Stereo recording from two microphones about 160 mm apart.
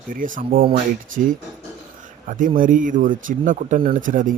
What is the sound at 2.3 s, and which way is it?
Speech, 55° right (ahead or behind).